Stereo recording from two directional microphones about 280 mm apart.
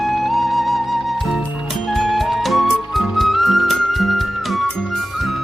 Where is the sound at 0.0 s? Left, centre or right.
Centre.